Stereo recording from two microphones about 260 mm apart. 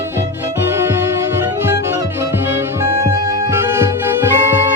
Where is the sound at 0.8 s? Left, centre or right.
Centre.